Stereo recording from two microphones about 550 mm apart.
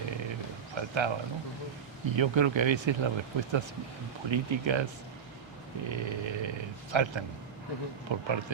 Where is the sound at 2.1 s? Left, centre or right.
Right.